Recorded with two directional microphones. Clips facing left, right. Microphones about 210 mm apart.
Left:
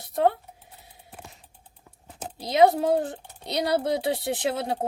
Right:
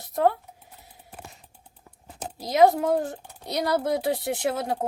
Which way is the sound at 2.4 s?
25° left (ahead or behind).